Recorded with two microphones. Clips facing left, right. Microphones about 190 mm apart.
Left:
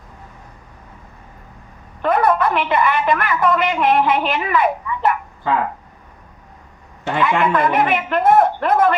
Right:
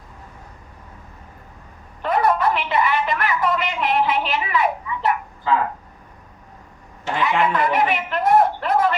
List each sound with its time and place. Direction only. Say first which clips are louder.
2.0 s a woman's voice: left 3 dB; 55° left (ahead or behind)
7.0 s a man's voice: left 3 dB; 55° left (ahead or behind)